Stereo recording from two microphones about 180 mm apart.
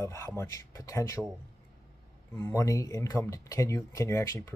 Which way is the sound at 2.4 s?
15° left (ahead or behind).